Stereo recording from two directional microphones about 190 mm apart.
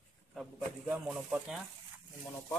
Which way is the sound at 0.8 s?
5° right (ahead or behind).